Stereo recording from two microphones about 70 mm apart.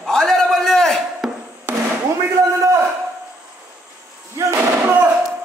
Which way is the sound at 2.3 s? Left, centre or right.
Right.